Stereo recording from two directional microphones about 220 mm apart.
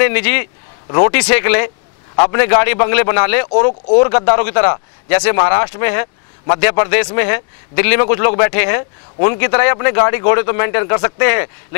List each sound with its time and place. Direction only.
0.0 s a man's voice: 15° left (ahead or behind)
0.8 s speech: 25° left (ahead or behind)
1.2 s a man's voice: 15° left (ahead or behind)
3.4 s a man's voice: 30° left (ahead or behind)